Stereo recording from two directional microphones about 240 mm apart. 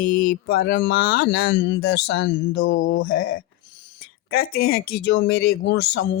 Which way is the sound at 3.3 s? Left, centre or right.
Left.